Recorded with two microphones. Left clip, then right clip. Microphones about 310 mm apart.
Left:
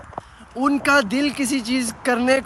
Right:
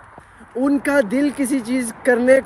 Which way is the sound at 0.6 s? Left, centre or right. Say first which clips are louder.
Even; centre.